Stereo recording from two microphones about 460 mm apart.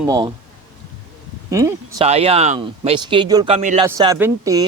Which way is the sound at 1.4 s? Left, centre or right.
Centre.